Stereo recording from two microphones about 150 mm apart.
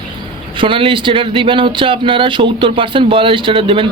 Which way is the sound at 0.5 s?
35° right (ahead or behind).